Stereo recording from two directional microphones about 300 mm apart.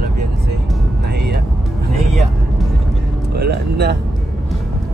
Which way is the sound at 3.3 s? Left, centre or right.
Right.